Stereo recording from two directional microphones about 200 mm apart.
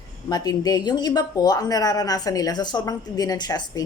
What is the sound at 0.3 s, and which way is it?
Speech, 20° left (ahead or behind).